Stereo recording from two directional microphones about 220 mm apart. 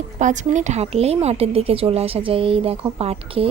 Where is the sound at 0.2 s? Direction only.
35° right (ahead or behind).